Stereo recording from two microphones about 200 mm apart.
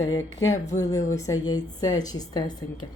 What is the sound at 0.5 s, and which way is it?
Speech, 35° left (ahead or behind).